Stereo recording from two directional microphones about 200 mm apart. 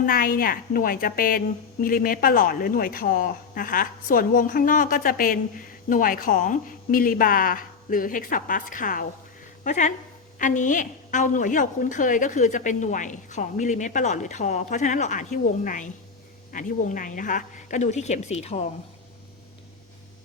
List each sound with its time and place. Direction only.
0.0 s a woman's voice: 45° left (ahead or behind)